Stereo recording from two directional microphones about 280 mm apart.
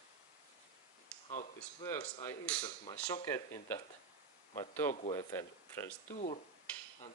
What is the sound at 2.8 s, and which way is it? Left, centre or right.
Speech, left.